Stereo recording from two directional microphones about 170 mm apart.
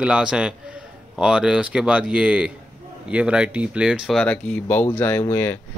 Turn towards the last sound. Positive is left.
turn(degrees=15)  # may be behind; listen again after turning